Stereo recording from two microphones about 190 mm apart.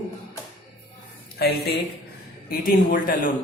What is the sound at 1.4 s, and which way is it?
Speech, 55° left (ahead or behind).